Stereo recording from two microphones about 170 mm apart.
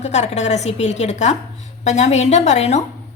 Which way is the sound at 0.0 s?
40° left (ahead or behind).